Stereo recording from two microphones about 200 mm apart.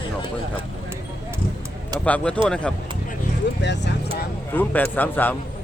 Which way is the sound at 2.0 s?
5° left (ahead or behind).